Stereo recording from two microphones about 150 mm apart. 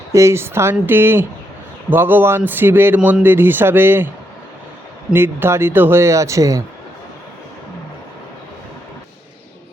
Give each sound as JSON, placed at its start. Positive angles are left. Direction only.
{"t": 0.1, "sound": "a man's voice", "side_deg": -20}
{"t": 5.1, "sound": "a man's voice", "side_deg": -15}